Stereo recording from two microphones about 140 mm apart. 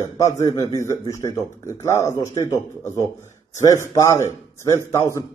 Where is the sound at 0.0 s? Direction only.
20° left (ahead or behind).